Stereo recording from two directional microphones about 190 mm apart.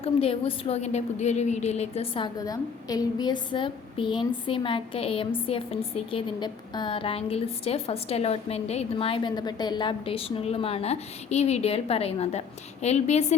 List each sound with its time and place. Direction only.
0.0 s a woman's voice: 30° left (ahead or behind)